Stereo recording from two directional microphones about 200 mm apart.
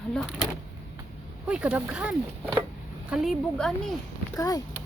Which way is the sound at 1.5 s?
5° right (ahead or behind).